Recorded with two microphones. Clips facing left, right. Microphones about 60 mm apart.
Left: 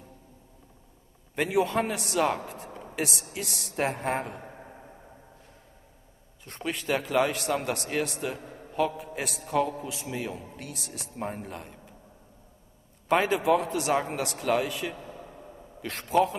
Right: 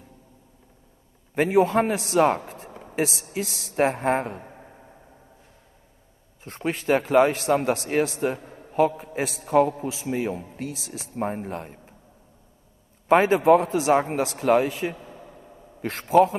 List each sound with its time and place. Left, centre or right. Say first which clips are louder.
1.3 s speech: right 6 dB; right
2.0 s a sound: right 6 dB; right
3.1 s a woman's voice: right 5 dB; left
3.7 s speech: right 7 dB; right
6.4 s a man's voice: right 6 dB; right
13.1 s a man's voice: right 7 dB; right
13.8 s speech: right 6 dB; right